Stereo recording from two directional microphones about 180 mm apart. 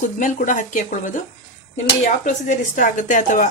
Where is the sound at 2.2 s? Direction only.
45° left (ahead or behind).